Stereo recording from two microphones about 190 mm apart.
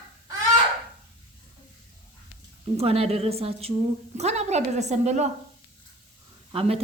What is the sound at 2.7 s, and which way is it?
A woman's voice, 30° right (ahead or behind).